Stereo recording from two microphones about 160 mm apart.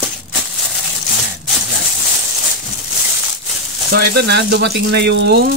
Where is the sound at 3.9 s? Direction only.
90° right.